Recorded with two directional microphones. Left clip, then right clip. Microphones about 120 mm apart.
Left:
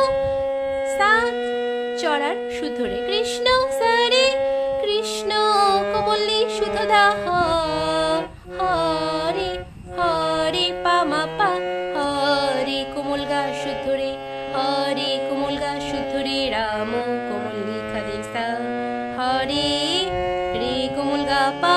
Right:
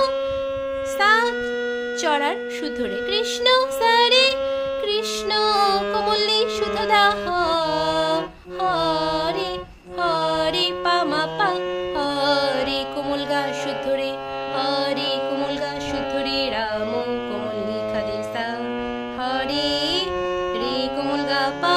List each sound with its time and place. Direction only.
0.9 s music: 10° left (ahead or behind)
2.0 s speech: 5° left (ahead or behind)
3.1 s music: 10° left (ahead or behind)
10.0 s music: 15° left (ahead or behind)
14.6 s music: 15° left (ahead or behind)
19.2 s music: 20° left (ahead or behind)
21.1 s music: 25° left (ahead or behind)